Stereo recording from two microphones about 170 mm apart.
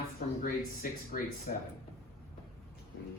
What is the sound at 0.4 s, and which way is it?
Speech, 55° left (ahead or behind).